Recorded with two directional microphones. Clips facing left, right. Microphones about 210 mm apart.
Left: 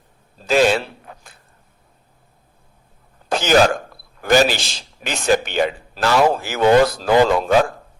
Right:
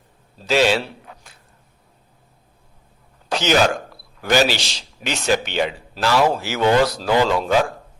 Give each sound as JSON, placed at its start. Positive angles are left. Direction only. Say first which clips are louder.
{"t": 0.4, "sound": "a man's voice", "louder": "left 2 dB", "side_deg": 50}
{"t": 3.2, "sound": "a sound", "louder": "even", "side_deg": 50}
{"t": 4.2, "sound": "a man's voice", "louder": "left 3 dB", "side_deg": 50}